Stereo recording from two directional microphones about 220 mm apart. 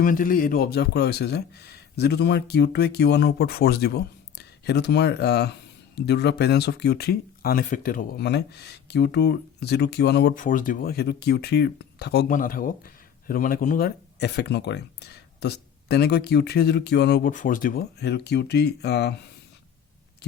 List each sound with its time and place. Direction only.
0.0 s speech: 40° left (ahead or behind)